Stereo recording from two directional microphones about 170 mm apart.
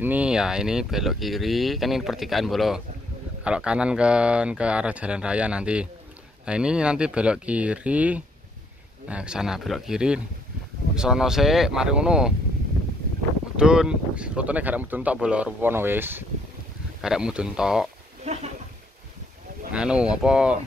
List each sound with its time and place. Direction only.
0.0 s speech: 10° right (ahead or behind)
13.6 s speech: 5° right (ahead or behind)
18.2 s a sound: 40° right (ahead or behind)
19.7 s speech: 5° right (ahead or behind)